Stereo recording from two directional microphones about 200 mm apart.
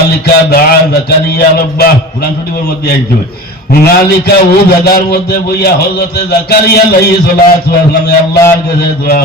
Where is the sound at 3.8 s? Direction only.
50° left (ahead or behind).